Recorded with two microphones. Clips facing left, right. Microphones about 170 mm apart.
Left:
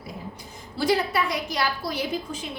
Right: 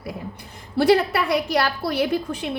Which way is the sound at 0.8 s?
65° right (ahead or behind).